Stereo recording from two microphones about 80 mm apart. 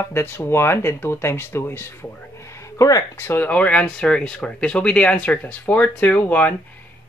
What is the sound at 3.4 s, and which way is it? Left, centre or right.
Speech, centre.